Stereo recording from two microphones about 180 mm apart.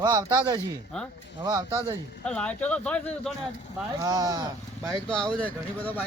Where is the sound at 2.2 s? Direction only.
5° left (ahead or behind).